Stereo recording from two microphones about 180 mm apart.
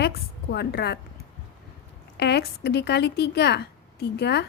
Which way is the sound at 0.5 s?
65° left (ahead or behind).